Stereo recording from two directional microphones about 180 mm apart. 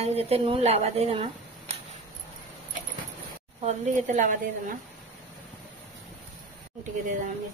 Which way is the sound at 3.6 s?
45° right (ahead or behind).